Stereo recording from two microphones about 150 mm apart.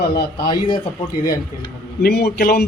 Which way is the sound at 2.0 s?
90° left.